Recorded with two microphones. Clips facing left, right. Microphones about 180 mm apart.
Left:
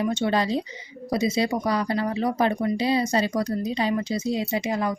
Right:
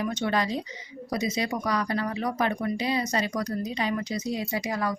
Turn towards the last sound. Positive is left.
turn(degrees=25)  # may be behind; listen again after turning